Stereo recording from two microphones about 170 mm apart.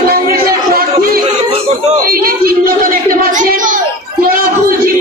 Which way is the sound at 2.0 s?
60° right (ahead or behind).